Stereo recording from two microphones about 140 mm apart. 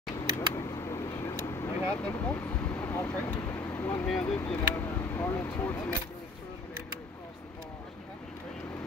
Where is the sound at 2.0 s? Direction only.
10° left (ahead or behind).